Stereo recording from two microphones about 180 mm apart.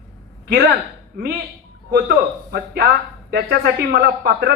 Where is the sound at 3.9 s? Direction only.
65° right (ahead or behind).